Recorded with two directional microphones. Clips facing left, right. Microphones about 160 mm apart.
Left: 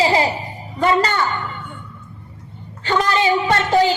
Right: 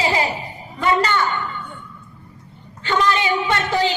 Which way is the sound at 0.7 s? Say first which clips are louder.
Left 2 dB; 35° left (ahead or behind).